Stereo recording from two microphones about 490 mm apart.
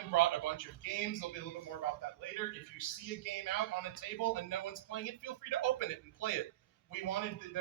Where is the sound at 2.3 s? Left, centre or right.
Left.